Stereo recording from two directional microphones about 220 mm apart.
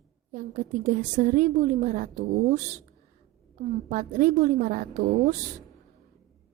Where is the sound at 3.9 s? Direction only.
35° right (ahead or behind).